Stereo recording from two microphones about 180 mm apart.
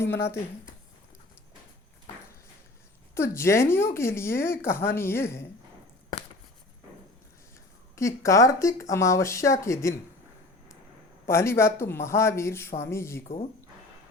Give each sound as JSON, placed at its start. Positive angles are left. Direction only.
{"t": 0.0, "sound": "a woman's voice", "side_deg": 15}
{"t": 3.2, "sound": "a woman's voice", "side_deg": 15}
{"t": 7.9, "sound": "a woman's voice", "side_deg": 15}
{"t": 11.3, "sound": "a woman's voice", "side_deg": 15}
{"t": 13.2, "sound": "speech", "side_deg": 35}